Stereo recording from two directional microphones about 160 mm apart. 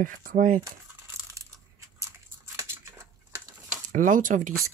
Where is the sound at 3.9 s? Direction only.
55° right (ahead or behind).